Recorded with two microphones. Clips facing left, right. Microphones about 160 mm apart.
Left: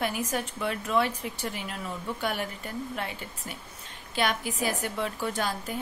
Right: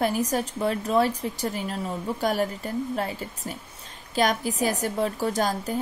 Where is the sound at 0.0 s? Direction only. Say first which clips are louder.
Right 5 dB; 40° right (ahead or behind).